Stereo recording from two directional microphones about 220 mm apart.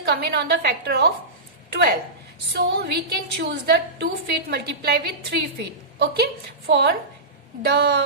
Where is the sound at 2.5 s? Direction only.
50° right (ahead or behind).